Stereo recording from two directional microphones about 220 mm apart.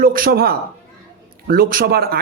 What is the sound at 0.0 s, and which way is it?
A man's voice, 40° right (ahead or behind).